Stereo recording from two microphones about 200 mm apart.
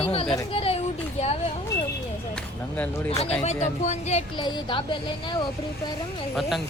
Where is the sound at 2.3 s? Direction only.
5° left (ahead or behind).